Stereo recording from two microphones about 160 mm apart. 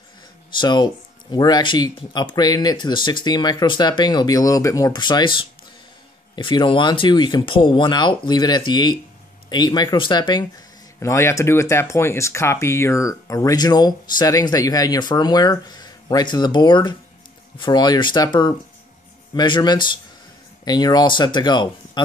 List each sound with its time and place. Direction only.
0.6 s speech: 30° left (ahead or behind)
11.0 s speech: 15° left (ahead or behind)